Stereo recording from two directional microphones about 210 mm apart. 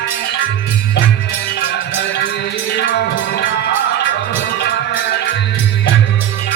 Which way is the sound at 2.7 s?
55° left (ahead or behind).